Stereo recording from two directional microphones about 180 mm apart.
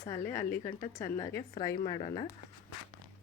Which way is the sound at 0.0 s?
15° left (ahead or behind).